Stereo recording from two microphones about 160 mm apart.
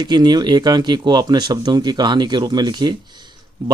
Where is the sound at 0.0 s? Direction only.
25° right (ahead or behind).